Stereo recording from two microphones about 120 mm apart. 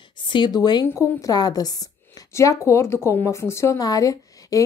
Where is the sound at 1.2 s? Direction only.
35° left (ahead or behind).